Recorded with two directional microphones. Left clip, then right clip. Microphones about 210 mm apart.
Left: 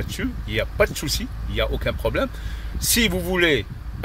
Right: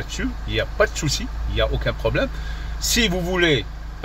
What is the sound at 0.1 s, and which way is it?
Speech, 20° left (ahead or behind).